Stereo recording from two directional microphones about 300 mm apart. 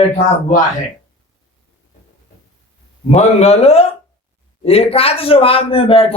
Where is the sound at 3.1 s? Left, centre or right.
Left.